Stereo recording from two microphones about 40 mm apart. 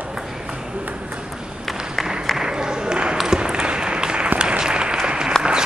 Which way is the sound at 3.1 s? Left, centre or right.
Centre.